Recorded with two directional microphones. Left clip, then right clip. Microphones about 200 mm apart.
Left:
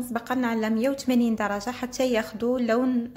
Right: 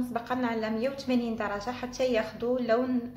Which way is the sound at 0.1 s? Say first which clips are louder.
Left 6 dB; 45° left (ahead or behind).